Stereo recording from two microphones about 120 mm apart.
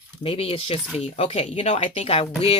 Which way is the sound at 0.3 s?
55° left (ahead or behind).